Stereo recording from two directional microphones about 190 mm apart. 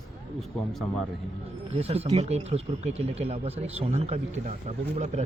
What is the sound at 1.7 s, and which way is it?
Speech, 30° right (ahead or behind).